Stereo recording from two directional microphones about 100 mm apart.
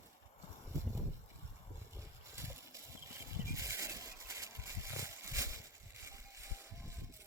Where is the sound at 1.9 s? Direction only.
30° right (ahead or behind).